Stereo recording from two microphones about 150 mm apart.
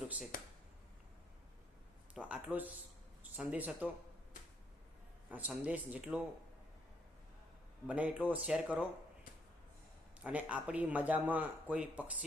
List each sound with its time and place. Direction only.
0.3 s a sound: 65° left (ahead or behind)
2.1 s speech: 10° right (ahead or behind)
5.3 s speech: 10° right (ahead or behind)
7.9 s speech: 10° right (ahead or behind)
10.2 s speech: 10° right (ahead or behind)